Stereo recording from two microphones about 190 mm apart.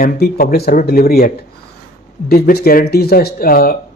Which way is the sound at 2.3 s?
55° left (ahead or behind).